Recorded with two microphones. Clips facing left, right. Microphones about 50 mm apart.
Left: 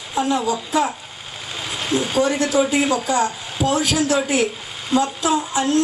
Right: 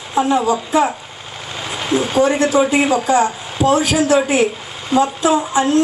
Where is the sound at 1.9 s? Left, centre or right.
Centre.